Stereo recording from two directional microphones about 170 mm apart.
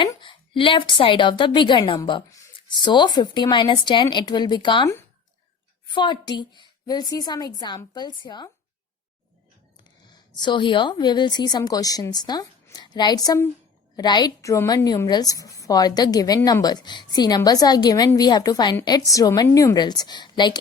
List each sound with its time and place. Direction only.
0.0 s a woman's voice: 30° left (ahead or behind)
10.1 s a woman's voice: 25° left (ahead or behind)